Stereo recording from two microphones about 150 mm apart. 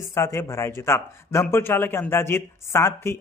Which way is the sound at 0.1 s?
20° left (ahead or behind).